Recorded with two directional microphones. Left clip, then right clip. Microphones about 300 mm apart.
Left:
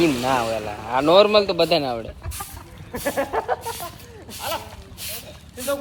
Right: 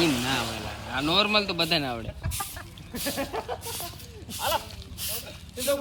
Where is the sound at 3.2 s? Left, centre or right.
Centre.